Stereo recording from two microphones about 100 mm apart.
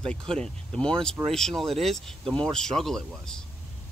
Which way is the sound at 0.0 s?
10° left (ahead or behind).